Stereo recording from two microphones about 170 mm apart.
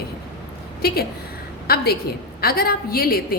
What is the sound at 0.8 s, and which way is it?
A woman's voice, 65° left (ahead or behind).